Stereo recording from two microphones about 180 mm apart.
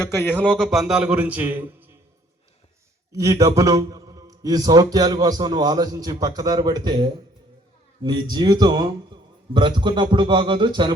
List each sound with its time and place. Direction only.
0.0 s a man's voice: 10° left (ahead or behind); by 2.0 s 10° right (ahead or behind)
3.1 s a man's voice: 15° right (ahead or behind)